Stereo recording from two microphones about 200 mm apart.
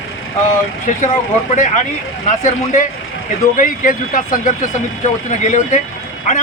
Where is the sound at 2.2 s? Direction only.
40° left (ahead or behind).